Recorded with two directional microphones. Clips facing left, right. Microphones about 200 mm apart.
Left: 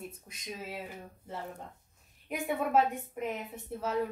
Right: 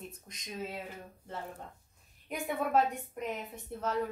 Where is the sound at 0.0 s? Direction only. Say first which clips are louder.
Left 3 dB; 5° left (ahead or behind).